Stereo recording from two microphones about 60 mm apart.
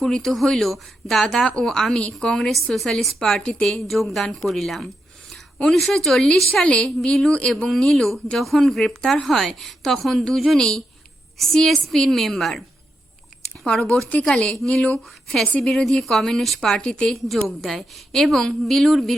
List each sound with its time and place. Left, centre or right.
0.0 s a woman's voice: centre
3.4 s a woman's voice: centre
3.7 s a woman's voice: centre
6.5 s a woman's voice: centre
13.7 s a woman's voice: centre
17.1 s a woman's voice: centre